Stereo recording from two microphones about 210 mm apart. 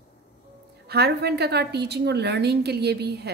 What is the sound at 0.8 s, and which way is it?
A woman's voice, 50° right (ahead or behind).